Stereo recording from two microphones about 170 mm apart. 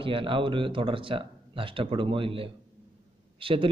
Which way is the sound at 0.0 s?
30° right (ahead or behind).